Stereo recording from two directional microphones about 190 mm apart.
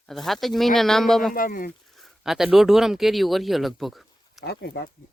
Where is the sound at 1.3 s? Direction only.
45° left (ahead or behind).